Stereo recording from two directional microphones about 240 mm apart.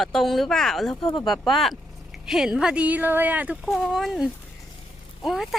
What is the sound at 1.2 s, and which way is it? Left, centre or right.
Speech, centre.